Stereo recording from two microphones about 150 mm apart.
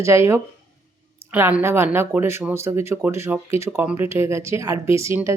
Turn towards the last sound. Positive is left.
turn(degrees=-15)  # may be behind; listen again after turning